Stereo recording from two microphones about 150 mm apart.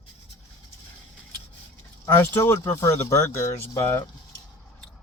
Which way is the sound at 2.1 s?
15° left (ahead or behind).